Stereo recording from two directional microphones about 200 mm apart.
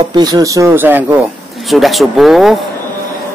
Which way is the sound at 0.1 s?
20° right (ahead or behind).